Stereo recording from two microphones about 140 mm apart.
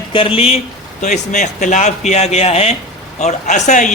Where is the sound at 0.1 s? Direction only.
40° left (ahead or behind).